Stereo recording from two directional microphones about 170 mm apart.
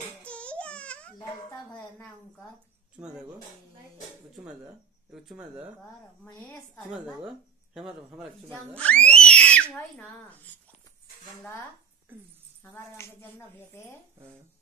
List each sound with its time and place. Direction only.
0.2 s a sound: 5° left (ahead or behind)
3.0 s speech: 5° right (ahead or behind)
5.1 s speech: centre (ahead or behind)
6.9 s speech: 5° right (ahead or behind)
8.5 s speech: 5° left (ahead or behind)
12.6 s speech: 15° left (ahead or behind)